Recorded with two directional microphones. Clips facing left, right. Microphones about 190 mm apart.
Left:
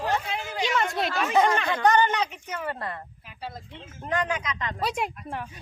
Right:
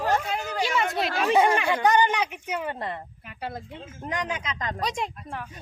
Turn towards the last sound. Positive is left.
turn(degrees=5)  # may be behind; listen again after turning